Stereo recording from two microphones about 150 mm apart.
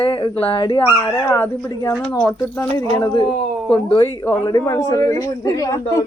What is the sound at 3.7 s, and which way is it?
A man's voice, 25° left (ahead or behind).